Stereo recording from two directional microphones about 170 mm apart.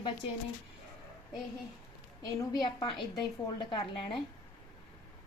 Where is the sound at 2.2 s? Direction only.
25° left (ahead or behind).